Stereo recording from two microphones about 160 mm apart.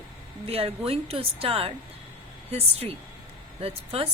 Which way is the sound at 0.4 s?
35° right (ahead or behind).